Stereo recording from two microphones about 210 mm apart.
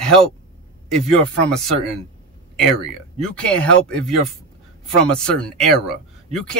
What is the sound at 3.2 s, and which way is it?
Speech, 5° left (ahead or behind).